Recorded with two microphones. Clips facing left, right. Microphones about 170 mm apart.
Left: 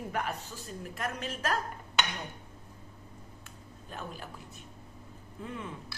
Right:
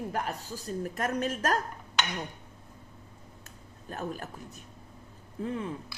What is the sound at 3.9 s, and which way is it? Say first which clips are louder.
Speech: right 6 dB; 45° right (ahead or behind).